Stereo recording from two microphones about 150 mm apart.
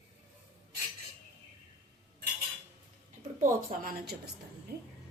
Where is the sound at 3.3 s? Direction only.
60° right (ahead or behind).